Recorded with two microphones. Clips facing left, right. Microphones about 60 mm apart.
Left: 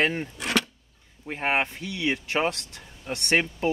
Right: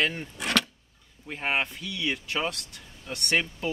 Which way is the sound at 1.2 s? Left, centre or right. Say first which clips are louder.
Left 3 dB; left.